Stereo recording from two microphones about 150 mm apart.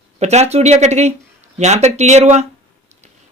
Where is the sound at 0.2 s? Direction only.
50° right (ahead or behind).